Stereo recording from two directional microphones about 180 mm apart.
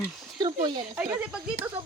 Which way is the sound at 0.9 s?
10° right (ahead or behind).